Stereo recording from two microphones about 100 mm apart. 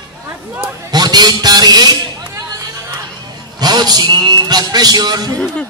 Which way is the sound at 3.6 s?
45° right (ahead or behind).